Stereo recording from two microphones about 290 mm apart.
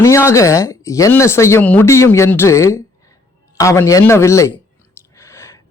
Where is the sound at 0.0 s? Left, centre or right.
Centre.